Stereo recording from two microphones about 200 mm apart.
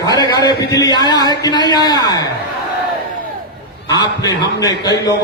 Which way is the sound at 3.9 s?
20° left (ahead or behind).